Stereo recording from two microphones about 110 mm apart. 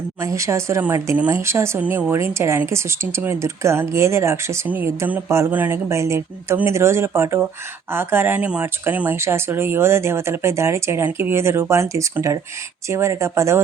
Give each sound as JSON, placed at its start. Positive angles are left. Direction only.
{"t": 0.2, "sound": "speech", "side_deg": -30}